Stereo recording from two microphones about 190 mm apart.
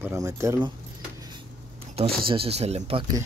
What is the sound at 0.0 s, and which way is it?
Speech, 15° right (ahead or behind).